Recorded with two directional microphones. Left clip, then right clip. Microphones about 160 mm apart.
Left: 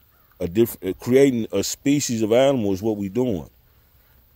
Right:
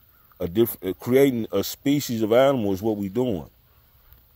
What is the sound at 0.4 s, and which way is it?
A man's voice, 15° left (ahead or behind).